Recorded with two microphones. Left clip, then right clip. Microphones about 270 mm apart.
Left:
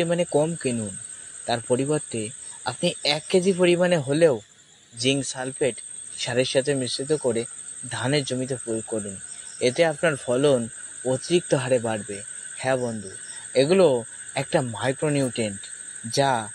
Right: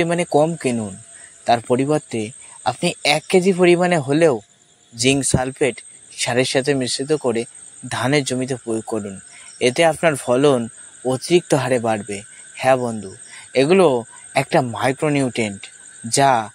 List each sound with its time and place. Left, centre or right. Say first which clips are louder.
0.0 s speech: right 5 dB; right